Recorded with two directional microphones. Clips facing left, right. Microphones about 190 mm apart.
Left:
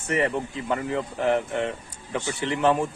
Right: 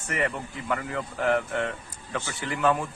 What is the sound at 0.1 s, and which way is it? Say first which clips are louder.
Speech: left 5 dB; 25° left (ahead or behind).